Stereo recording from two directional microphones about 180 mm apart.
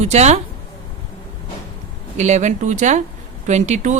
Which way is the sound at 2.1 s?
40° right (ahead or behind).